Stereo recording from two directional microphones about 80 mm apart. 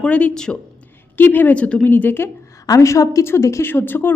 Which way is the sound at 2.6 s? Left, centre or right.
Left.